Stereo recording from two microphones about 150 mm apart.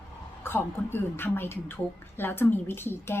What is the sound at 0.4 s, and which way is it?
A woman's voice, 15° left (ahead or behind).